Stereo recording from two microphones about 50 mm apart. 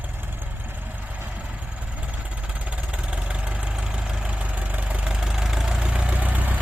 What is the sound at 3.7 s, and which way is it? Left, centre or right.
Vehicle, centre.